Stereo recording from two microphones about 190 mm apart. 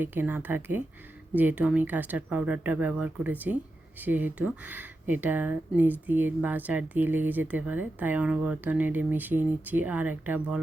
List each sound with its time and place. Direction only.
0.0 s speech: 10° right (ahead or behind)